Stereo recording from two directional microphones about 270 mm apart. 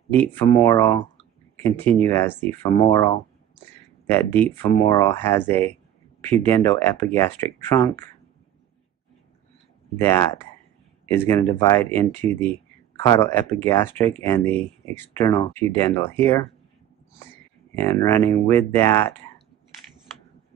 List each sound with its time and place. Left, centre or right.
0.1 s speech: centre
2.0 s speech: centre
9.9 s speech: centre
17.7 s speech: centre